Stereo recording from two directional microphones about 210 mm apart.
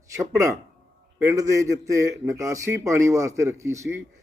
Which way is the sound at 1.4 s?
15° right (ahead or behind).